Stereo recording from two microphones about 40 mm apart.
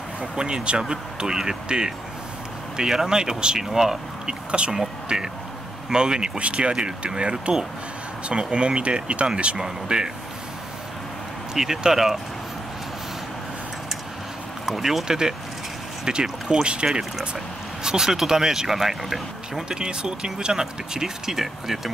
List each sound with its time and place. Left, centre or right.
0.2 s speech: right
4.5 s speech: right
4.7 s speech: centre
11.5 s speech: centre
14.7 s speech: centre
19.7 s speech: right